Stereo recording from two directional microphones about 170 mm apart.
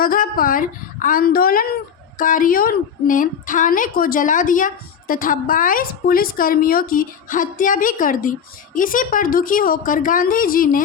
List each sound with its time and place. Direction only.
0.0 s a woman's voice: 55° left (ahead or behind)